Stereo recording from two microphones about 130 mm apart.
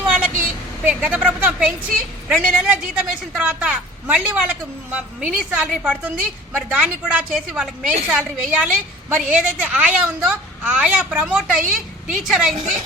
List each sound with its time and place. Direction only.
0.9 s a woman's voice: 10° right (ahead or behind)
12.5 s a woman's voice: 70° right (ahead or behind)